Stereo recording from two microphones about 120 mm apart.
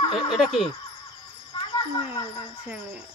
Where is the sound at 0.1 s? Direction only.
40° left (ahead or behind).